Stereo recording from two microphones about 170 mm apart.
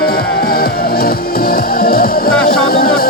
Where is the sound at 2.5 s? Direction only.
60° left (ahead or behind).